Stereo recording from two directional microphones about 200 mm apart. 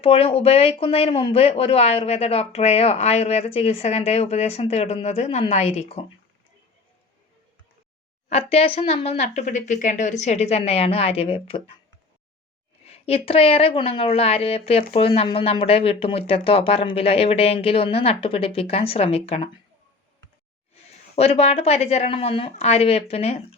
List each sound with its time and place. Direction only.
0.0 s speech: 30° left (ahead or behind)
8.3 s speech: 30° left (ahead or behind)
12.8 s a woman's voice: 30° left (ahead or behind)
21.2 s speech: 30° left (ahead or behind)